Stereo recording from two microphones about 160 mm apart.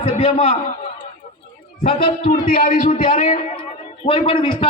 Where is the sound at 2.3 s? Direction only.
60° left (ahead or behind).